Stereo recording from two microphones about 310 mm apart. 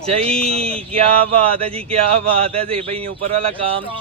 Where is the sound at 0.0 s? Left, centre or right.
Centre.